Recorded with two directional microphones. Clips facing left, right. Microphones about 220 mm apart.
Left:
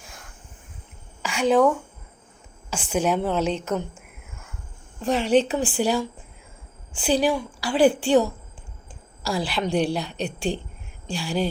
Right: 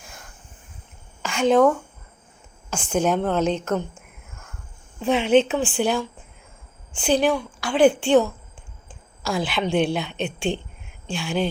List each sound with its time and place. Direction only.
1.2 s speech: 5° left (ahead or behind)
2.9 s a woman's voice: 5° left (ahead or behind)
10.1 s a woman's voice: 35° left (ahead or behind)
11.1 s a woman's voice: centre (ahead or behind)